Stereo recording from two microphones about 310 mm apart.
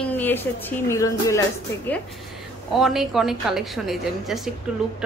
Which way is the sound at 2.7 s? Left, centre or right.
Centre.